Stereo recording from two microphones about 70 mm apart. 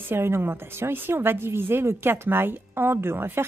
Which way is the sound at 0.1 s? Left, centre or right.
Right.